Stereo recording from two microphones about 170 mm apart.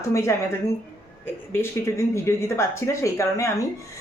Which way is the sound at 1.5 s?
15° left (ahead or behind).